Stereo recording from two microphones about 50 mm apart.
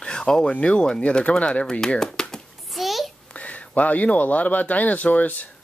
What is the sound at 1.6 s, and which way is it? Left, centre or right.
Speech, centre.